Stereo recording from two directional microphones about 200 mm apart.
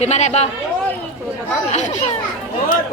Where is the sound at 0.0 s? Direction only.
35° left (ahead or behind).